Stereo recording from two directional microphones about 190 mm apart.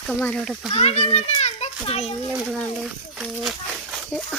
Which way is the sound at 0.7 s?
35° left (ahead or behind).